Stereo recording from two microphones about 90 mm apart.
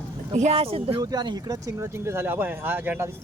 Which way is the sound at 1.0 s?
50° right (ahead or behind).